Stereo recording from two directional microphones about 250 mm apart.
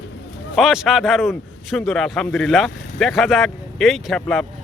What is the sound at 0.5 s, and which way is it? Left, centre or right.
Speech, centre.